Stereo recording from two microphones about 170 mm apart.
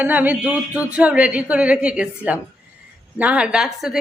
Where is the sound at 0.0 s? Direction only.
10° right (ahead or behind).